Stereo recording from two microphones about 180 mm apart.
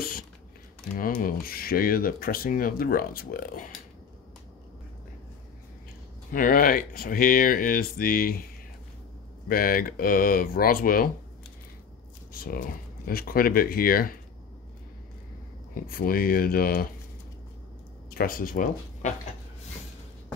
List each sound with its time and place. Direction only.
0.9 s speech: 50° left (ahead or behind)
6.3 s speech: 50° left (ahead or behind)
9.5 s speech: 55° left (ahead or behind)
12.3 s speech: 55° left (ahead or behind)
15.7 s speech: 50° left (ahead or behind)
18.1 s speech: 50° left (ahead or behind)